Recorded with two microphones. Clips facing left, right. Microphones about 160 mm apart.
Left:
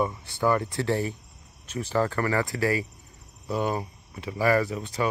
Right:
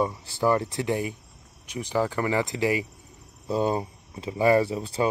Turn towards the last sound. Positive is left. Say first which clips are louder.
# right 3 dB
turn(degrees=-30)  # may be behind; listen again after turning